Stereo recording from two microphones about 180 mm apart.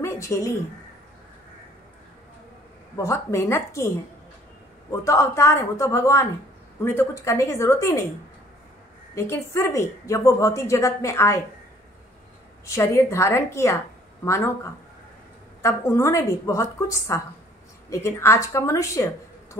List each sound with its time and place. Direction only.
0.0 s speech: 15° left (ahead or behind)
3.0 s a woman's voice: 15° left (ahead or behind)
5.0 s a woman's voice: 15° left (ahead or behind)
9.1 s a woman's voice: 15° left (ahead or behind)
12.6 s a woman's voice: 15° left (ahead or behind)